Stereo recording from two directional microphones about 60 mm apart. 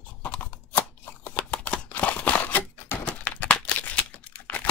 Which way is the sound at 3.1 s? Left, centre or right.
Left.